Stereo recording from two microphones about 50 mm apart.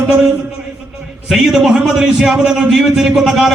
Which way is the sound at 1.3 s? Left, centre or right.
Centre.